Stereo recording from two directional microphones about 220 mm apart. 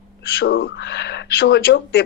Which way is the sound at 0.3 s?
45° left (ahead or behind).